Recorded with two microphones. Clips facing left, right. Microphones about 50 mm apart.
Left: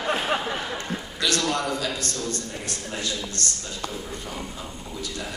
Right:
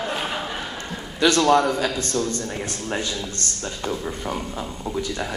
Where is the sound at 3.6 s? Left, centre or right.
Right.